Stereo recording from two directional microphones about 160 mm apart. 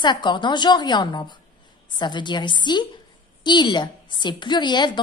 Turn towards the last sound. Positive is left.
turn(degrees=30)  # may be behind; listen again after turning